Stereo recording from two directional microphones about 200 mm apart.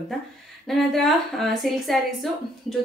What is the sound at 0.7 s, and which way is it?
Speech, centre (ahead or behind).